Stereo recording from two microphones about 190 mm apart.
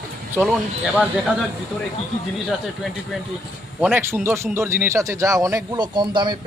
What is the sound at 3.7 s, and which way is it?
Speech, 10° right (ahead or behind).